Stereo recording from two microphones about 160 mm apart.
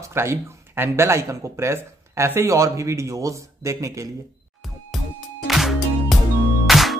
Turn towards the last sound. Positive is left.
turn(degrees=0)  # may be behind; listen again after turning